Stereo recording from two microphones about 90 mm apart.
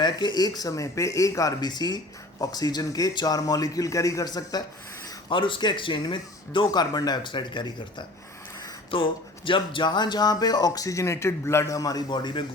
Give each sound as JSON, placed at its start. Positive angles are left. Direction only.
{"t": 0.0, "sound": "speech", "side_deg": 55}
{"t": 5.3, "sound": "speech", "side_deg": 70}
{"t": 8.9, "sound": "speech", "side_deg": 75}